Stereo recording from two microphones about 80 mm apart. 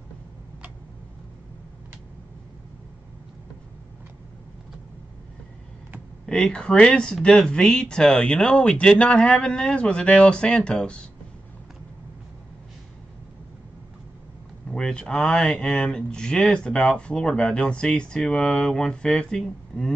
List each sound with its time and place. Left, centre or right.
6.2 s speech: centre
14.7 s speech: centre